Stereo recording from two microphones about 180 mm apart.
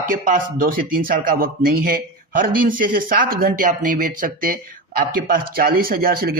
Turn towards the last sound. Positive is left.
turn(degrees=-55)  # may be behind; listen again after turning